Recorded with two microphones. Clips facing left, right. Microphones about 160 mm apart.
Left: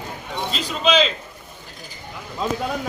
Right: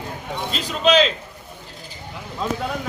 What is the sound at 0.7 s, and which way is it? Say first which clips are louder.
Speech: right 2 dB; centre (ahead or behind).